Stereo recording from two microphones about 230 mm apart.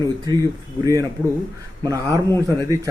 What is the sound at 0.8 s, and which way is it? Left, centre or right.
Speech, centre.